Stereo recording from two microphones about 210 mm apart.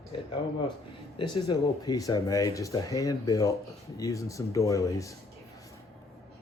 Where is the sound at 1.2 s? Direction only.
20° left (ahead or behind).